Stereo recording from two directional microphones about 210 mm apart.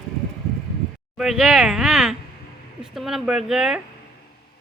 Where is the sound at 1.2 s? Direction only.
Centre (ahead or behind).